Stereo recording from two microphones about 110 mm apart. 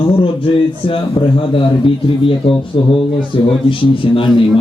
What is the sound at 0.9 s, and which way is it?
A man's voice, 50° left (ahead or behind).